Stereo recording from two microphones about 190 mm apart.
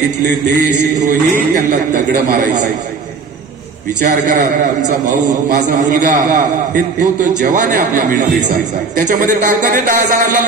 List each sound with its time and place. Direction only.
0.9 s a man's voice: 45° right (ahead or behind)
4.0 s a man's voice: 40° right (ahead or behind)